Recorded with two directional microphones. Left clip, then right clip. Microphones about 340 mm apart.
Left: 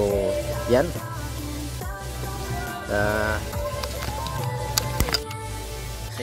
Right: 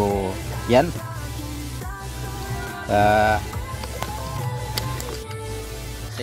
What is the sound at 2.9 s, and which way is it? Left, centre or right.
Music, centre.